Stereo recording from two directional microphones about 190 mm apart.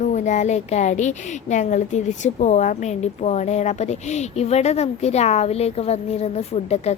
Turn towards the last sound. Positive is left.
turn(degrees=35)  # may be behind; listen again after turning